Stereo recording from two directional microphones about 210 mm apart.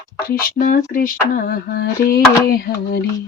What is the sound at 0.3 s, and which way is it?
Speech, 45° left (ahead or behind).